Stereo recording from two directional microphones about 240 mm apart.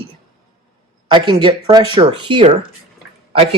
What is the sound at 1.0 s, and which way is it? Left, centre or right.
Speech, centre.